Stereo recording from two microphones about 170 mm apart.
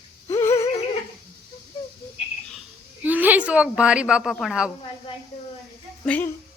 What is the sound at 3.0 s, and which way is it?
A woman's voice, 10° right (ahead or behind).